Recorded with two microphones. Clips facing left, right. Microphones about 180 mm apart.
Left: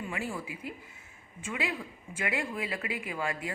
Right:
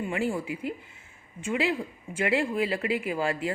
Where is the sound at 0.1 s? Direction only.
30° right (ahead or behind).